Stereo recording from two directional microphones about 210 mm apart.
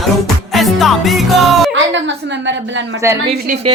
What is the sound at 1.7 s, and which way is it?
A woman's voice, 60° right (ahead or behind).